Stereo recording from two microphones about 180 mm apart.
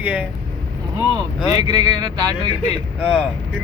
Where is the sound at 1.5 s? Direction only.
25° right (ahead or behind).